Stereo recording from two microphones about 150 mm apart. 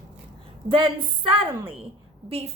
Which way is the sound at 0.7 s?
35° right (ahead or behind).